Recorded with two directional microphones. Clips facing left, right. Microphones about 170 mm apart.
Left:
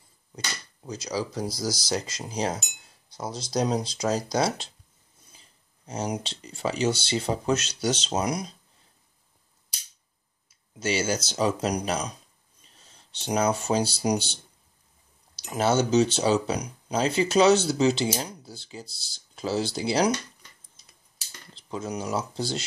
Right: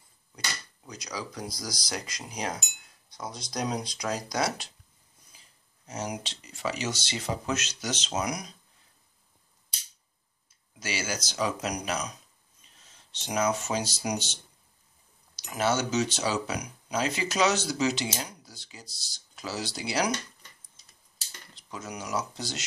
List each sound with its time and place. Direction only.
0.8 s speech: 30° left (ahead or behind)
10.8 s speech: 25° left (ahead or behind)
21.5 s speech: 30° left (ahead or behind)